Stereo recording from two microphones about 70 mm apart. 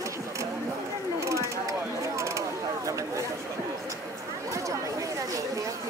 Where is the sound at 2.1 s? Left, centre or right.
Right.